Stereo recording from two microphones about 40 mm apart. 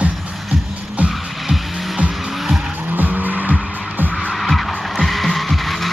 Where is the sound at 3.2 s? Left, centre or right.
Right.